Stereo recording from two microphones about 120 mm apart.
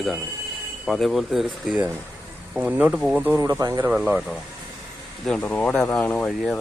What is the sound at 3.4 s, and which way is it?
Speech, 30° right (ahead or behind).